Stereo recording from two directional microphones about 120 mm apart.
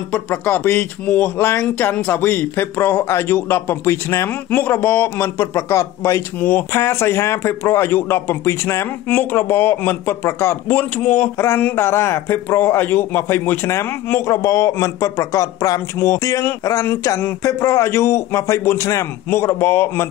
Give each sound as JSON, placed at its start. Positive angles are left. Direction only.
{"t": 0.1, "sound": "a man's voice", "side_deg": 15}